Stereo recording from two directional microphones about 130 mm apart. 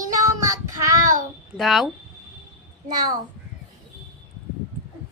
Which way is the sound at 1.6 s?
Centre (ahead or behind).